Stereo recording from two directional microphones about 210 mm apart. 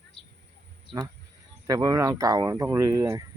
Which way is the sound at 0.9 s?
20° right (ahead or behind).